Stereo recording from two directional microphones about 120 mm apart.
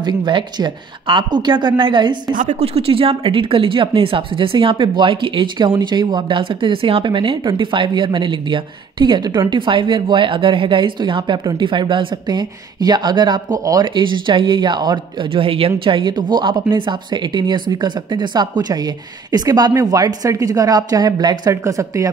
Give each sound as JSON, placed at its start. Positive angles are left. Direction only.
{"t": 0.0, "sound": "speech", "side_deg": -40}
{"t": 2.6, "sound": "speech", "side_deg": -55}
{"t": 15.3, "sound": "speech", "side_deg": -50}